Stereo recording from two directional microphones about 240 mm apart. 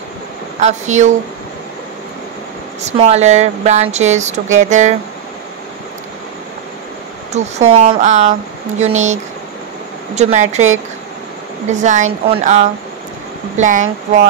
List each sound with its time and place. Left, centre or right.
0.6 s speech: right
2.8 s a woman's voice: right
7.3 s speech: right
11.7 s a woman's voice: right